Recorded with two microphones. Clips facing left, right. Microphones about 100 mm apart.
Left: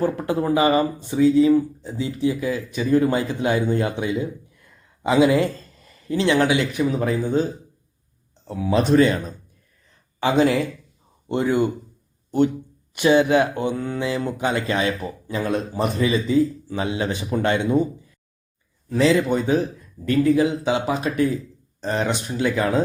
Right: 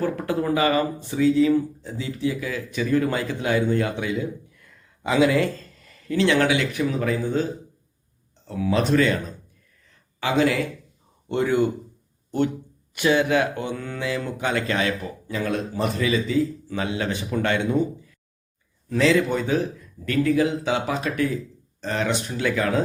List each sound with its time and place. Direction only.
0.0 s speech: 20° left (ahead or behind)
8.4 s speech: 20° left (ahead or behind)
10.2 s speech: 30° left (ahead or behind)
11.3 s speech: 15° left (ahead or behind)
12.9 s speech: 25° left (ahead or behind)
18.9 s speech: 20° left (ahead or behind)